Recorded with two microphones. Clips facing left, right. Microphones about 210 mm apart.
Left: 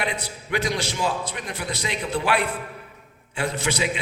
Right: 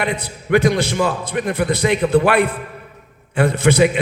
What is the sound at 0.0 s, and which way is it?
A man's voice, 55° right (ahead or behind).